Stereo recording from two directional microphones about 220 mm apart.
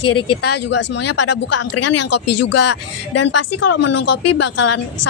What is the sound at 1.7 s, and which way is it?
Speech, 90° left.